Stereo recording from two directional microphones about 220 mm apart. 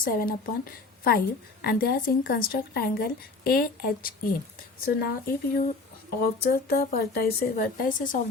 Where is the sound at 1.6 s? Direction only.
45° left (ahead or behind).